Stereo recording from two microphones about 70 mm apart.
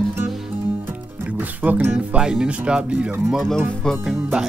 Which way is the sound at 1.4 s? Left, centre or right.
Right.